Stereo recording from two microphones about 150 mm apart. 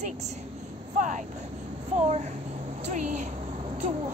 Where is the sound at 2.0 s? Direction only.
45° right (ahead or behind).